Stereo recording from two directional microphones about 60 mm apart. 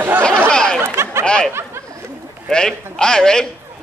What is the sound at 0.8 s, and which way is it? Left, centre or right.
Speech, right.